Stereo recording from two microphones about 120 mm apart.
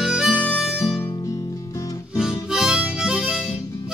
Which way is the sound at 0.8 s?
20° left (ahead or behind).